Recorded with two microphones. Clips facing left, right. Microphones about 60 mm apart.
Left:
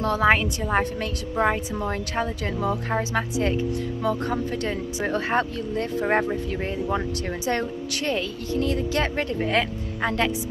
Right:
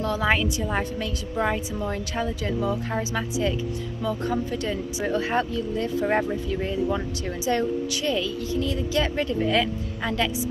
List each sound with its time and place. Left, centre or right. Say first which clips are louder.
0.0 s a woman's voice: left 3 dB; left
6.0 s speech: left 2 dB; left
7.4 s a woman's voice: right 4 dB; left